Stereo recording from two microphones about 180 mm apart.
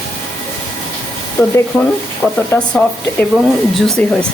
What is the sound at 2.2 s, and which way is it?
Speech, 10° left (ahead or behind).